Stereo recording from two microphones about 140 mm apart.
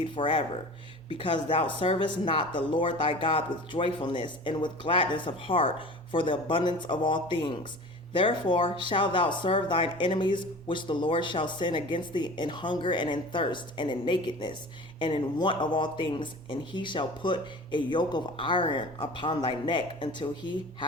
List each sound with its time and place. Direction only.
0.0 s speech: 35° left (ahead or behind)